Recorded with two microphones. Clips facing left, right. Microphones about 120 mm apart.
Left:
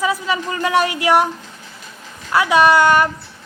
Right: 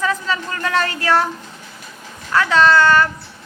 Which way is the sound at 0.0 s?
10° left (ahead or behind).